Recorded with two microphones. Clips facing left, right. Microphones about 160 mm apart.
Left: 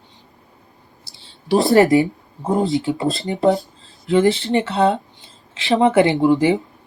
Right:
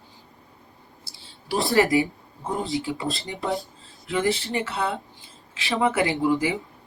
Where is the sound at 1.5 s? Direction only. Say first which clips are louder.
Left 7 dB; 40° left (ahead or behind).